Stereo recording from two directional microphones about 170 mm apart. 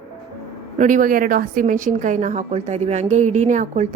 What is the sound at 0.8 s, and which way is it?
A woman's voice, 50° right (ahead or behind).